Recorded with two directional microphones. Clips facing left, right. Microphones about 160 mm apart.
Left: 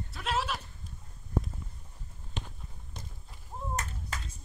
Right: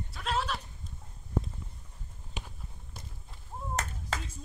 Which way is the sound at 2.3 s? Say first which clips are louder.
Left 2 dB; 10° right (ahead or behind).